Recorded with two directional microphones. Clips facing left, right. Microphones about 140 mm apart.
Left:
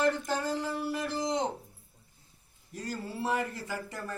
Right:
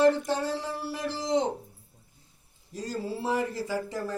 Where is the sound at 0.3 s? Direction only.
30° right (ahead or behind).